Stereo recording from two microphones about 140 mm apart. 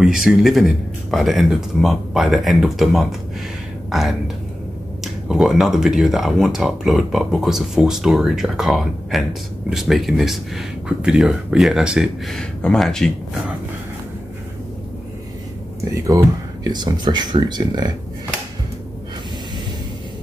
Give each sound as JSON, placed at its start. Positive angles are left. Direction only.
{"t": 0.0, "sound": "speech", "side_deg": -5}
{"t": 15.9, "sound": "speech", "side_deg": -25}